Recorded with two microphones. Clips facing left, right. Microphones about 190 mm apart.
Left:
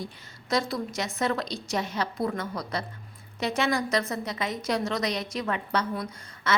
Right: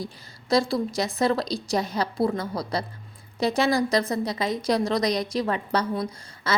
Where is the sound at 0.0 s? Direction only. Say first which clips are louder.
Right 3 dB; 35° right (ahead or behind).